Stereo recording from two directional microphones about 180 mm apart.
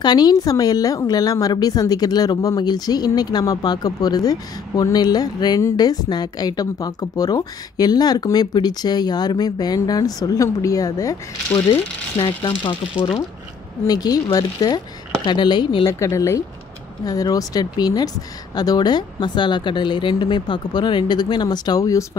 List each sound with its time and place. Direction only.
0.0 s a woman's voice: 25° left (ahead or behind)